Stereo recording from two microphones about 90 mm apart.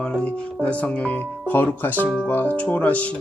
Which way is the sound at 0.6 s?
15° left (ahead or behind).